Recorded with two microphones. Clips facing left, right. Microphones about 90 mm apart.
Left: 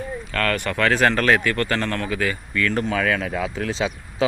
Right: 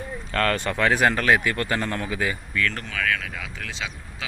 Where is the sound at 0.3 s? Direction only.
30° right (ahead or behind).